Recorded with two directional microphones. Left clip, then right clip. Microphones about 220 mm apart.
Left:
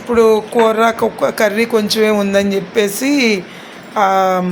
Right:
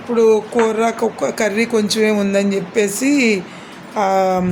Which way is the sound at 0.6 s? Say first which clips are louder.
Left 4 dB; 5° right (ahead or behind).